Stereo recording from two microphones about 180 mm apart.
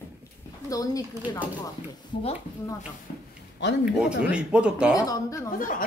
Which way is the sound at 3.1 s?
50° left (ahead or behind).